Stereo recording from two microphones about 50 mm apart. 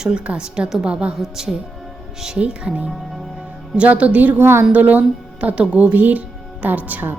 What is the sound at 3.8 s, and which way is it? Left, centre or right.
Speech, right.